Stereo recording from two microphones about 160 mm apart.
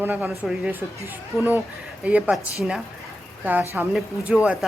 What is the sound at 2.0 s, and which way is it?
Speech, 10° right (ahead or behind).